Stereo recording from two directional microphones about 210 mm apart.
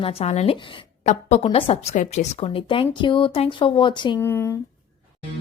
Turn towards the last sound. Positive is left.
turn(degrees=10)  # may be behind; listen again after turning